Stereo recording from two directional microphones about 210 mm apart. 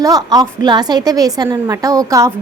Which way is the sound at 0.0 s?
15° right (ahead or behind).